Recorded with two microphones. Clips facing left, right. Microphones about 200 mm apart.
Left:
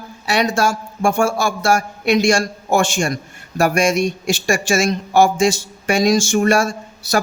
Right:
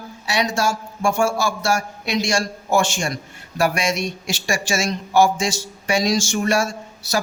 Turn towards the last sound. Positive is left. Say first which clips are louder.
# left 4 dB
turn(degrees=55)  # may be behind; listen again after turning